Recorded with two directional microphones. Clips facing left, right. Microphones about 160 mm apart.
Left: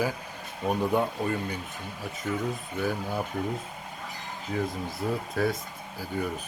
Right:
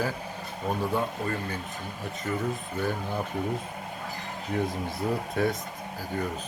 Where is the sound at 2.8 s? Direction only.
10° left (ahead or behind).